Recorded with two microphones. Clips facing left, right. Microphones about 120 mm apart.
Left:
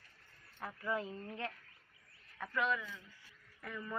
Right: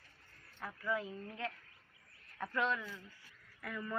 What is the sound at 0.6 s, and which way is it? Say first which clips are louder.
Speech: even; 20° left (ahead or behind).